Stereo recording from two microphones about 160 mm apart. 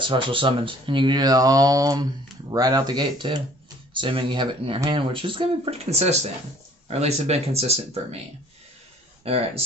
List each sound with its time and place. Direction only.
0.0 s speech: 30° right (ahead or behind)
9.2 s speech: 40° right (ahead or behind)